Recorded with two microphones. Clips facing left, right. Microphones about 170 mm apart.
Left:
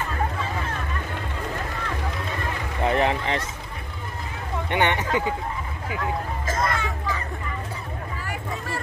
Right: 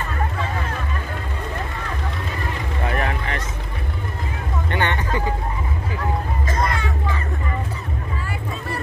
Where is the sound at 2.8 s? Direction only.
25° left (ahead or behind).